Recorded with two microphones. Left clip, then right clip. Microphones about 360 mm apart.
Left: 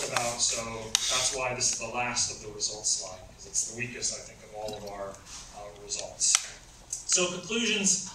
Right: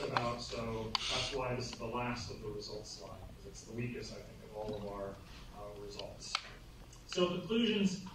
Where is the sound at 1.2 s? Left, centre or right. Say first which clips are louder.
Left 9 dB; left.